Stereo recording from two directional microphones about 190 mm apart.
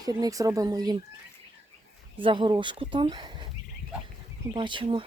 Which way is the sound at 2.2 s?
25° right (ahead or behind).